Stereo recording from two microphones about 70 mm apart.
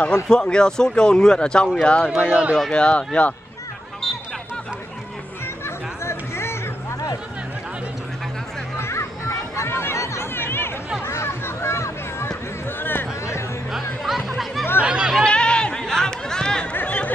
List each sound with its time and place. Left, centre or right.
0.0 s speech: centre
2.1 s speech: centre
2.7 s speech: centre
6.0 s music: left
8.7 s children playing: left
11.1 s a sound: left
13.7 s music: centre
14.8 s chatter: centre
15.2 s chatter: centre
16.7 s chatter: left